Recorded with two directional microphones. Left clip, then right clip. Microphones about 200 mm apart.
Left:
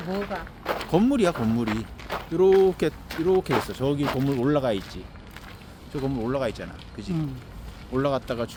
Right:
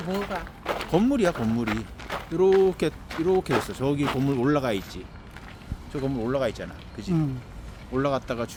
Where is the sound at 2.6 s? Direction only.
5° left (ahead or behind).